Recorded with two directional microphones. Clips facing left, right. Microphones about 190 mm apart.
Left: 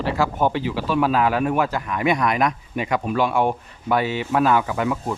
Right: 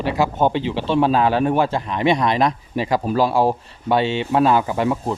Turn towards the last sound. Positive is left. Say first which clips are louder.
# right 3 dB
turn(degrees=-30)  # may be behind; listen again after turning